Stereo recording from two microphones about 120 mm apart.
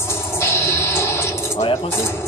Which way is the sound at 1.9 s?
20° left (ahead or behind).